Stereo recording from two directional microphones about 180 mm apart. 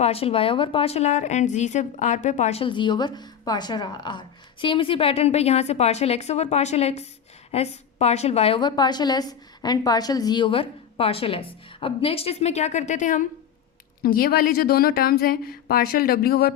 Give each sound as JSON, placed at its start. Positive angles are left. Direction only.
{"t": 0.0, "sound": "a woman's voice", "side_deg": 35}